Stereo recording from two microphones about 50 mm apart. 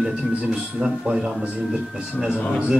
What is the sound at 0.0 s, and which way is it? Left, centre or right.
Speech, right.